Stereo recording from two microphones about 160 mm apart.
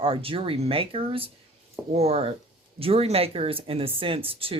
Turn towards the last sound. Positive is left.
turn(degrees=-35)  # may be behind; listen again after turning